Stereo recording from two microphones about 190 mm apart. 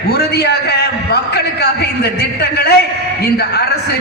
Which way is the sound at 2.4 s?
55° left (ahead or behind).